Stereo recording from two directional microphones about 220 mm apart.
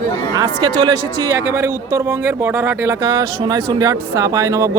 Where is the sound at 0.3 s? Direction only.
20° right (ahead or behind).